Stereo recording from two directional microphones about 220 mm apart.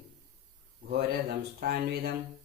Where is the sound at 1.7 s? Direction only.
45° right (ahead or behind).